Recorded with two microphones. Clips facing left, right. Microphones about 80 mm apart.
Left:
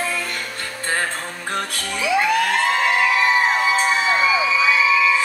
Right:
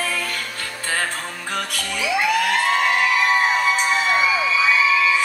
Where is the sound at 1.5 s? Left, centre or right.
Left.